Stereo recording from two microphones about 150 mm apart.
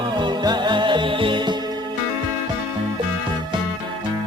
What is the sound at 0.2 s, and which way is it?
Music, 30° right (ahead or behind).